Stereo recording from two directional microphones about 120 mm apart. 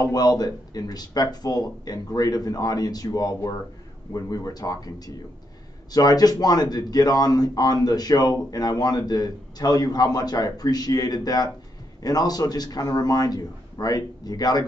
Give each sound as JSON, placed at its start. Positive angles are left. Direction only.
{"t": 0.0, "sound": "speech", "side_deg": 35}